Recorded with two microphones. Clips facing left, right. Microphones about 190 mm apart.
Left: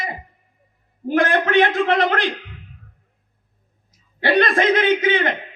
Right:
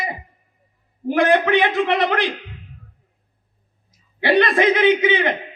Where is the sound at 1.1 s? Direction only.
50° left (ahead or behind).